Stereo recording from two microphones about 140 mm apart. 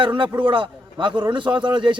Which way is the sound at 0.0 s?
35° right (ahead or behind).